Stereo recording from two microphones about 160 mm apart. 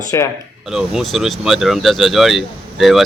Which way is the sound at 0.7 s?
Centre (ahead or behind).